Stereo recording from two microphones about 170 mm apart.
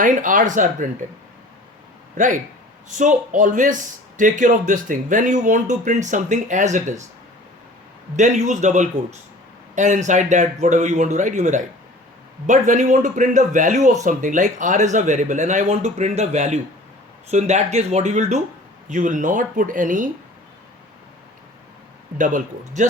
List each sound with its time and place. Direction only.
0.0 s speech: 50° right (ahead or behind)
2.1 s speech: 45° right (ahead or behind)
8.1 s speech: 45° right (ahead or behind)
22.2 s speech: 50° right (ahead or behind)